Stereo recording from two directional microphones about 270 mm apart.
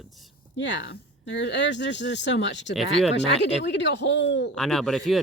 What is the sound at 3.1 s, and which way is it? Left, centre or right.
Speech, left.